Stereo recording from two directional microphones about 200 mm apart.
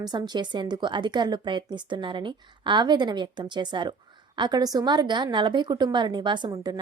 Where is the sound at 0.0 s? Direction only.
20° right (ahead or behind).